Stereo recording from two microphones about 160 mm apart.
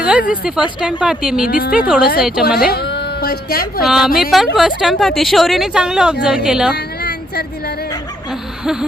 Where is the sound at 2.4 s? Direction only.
85° left.